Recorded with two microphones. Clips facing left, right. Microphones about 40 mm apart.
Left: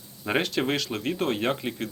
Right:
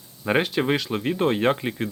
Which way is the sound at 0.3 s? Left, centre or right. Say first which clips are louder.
Right 4 dB; centre.